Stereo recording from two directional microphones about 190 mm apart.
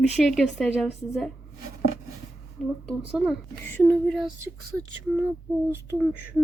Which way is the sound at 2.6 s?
5° left (ahead or behind).